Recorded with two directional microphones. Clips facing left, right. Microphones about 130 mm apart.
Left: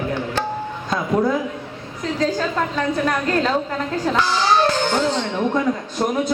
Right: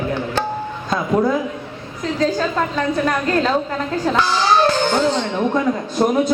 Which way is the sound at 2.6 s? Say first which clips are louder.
Right 2 dB; 40° right (ahead or behind).